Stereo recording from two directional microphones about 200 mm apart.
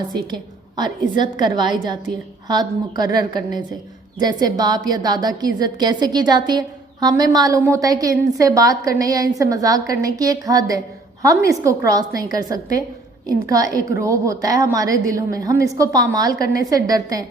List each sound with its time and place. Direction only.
1.2 s a woman's voice: 20° right (ahead or behind)